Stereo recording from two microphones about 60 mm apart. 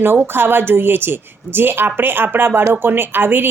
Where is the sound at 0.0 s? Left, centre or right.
Right.